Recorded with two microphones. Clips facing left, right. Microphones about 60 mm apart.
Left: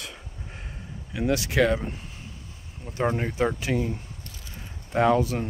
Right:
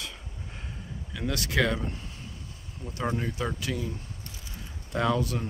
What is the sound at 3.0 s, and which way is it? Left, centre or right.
Speech, left.